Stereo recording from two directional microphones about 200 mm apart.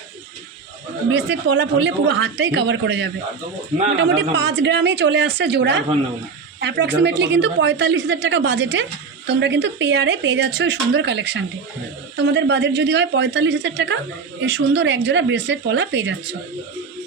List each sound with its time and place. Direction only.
1.3 s a woman's voice: 65° right (ahead or behind)